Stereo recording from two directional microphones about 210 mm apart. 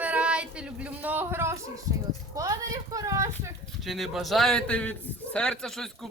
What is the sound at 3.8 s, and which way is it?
A woman's voice, centre (ahead or behind).